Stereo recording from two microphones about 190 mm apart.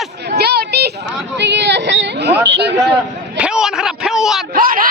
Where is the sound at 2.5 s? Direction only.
60° right (ahead or behind).